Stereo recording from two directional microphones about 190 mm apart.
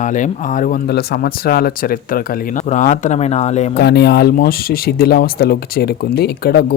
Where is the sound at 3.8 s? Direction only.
60° left (ahead or behind).